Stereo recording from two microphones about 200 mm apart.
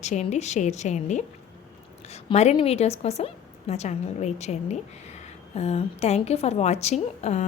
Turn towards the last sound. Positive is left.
turn(degrees=35)  # may be behind; listen again after turning